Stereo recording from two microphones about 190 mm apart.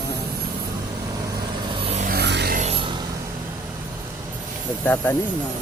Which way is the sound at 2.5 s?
35° right (ahead or behind).